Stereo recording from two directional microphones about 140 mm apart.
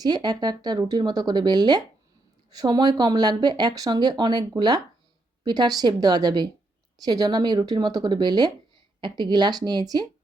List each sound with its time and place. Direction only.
0.0 s a woman's voice: 30° right (ahead or behind)